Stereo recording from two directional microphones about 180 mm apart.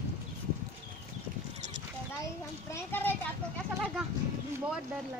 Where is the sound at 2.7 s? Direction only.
15° left (ahead or behind).